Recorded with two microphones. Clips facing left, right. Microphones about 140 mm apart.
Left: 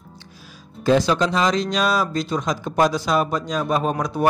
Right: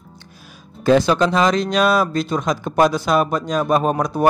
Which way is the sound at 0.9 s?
55° right (ahead or behind).